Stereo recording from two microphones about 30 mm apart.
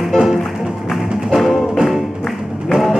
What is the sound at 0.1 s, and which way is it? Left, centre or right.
Music, left.